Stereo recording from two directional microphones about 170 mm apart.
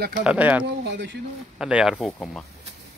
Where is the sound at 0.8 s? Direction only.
90° right.